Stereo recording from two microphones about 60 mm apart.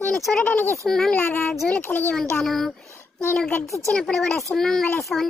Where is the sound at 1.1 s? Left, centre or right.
Left.